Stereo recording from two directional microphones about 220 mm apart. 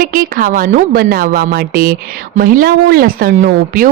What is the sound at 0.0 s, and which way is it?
A woman's voice, 40° right (ahead or behind).